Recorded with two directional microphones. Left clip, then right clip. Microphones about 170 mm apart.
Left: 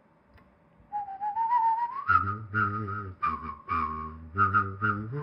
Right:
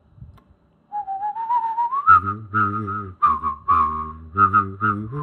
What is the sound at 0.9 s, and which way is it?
Whistling, 55° right (ahead or behind).